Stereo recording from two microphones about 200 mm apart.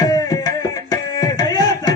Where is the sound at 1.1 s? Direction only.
20° left (ahead or behind).